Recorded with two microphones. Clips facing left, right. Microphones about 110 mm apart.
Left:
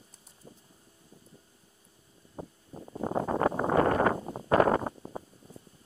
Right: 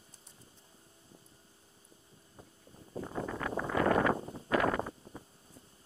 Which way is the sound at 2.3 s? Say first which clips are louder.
Left 13 dB; 45° left (ahead or behind).